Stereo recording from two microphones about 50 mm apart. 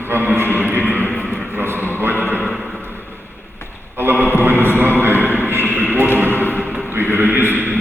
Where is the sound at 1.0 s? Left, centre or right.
Left.